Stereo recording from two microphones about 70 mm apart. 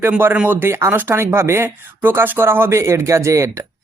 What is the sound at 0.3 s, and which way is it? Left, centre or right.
Speech, right.